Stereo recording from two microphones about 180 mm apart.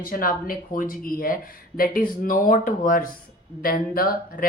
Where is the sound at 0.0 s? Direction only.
50° left (ahead or behind).